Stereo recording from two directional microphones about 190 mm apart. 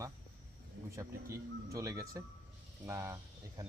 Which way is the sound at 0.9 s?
15° right (ahead or behind).